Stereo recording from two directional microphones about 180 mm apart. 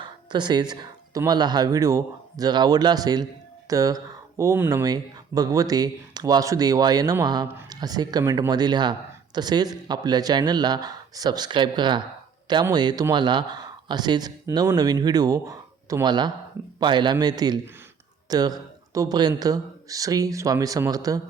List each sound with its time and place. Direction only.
0.0 s speech: 25° right (ahead or behind)